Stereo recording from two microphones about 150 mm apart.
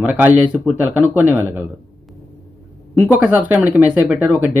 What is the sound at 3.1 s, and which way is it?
Speech, 10° right (ahead or behind).